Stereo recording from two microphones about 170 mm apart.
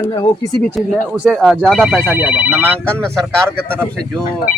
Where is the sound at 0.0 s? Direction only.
25° left (ahead or behind).